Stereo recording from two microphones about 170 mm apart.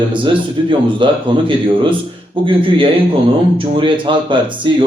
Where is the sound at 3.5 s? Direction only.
30° right (ahead or behind).